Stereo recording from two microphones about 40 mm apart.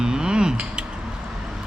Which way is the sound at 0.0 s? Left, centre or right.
Centre.